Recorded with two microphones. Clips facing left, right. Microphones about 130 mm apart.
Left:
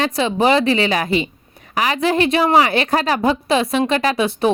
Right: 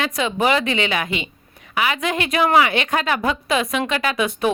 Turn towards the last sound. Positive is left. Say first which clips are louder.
# left 3 dB
turn(degrees=35)  # may be behind; listen again after turning